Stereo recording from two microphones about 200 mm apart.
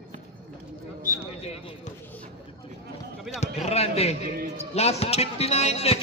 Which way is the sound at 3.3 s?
Centre (ahead or behind).